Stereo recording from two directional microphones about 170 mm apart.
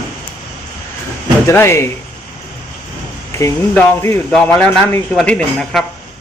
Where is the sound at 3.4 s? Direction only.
15° left (ahead or behind).